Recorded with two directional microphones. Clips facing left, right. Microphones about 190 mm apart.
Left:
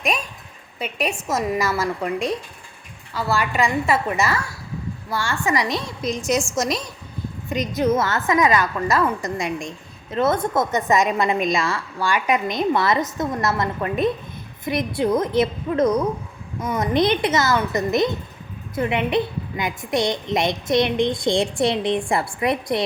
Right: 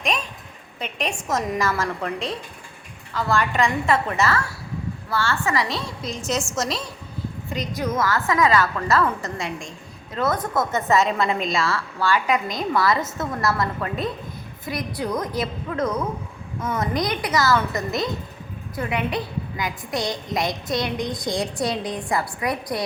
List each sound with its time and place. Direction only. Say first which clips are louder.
0.8 s a woman's voice: left 3 dB; 5° left (ahead or behind); by 22.8 s 25° left (ahead or behind)